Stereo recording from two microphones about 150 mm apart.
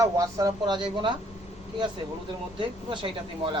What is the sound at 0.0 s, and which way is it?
Speech, 20° right (ahead or behind).